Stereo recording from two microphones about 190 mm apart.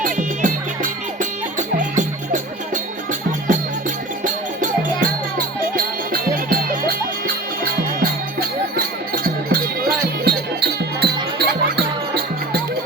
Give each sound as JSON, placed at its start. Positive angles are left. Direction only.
{"t": 0.0, "sound": "music", "side_deg": -45}